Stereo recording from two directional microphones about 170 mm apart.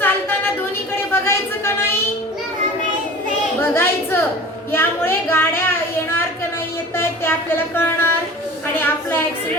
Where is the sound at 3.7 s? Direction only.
15° left (ahead or behind).